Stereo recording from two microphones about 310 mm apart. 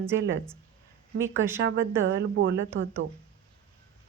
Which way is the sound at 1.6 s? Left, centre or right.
Right.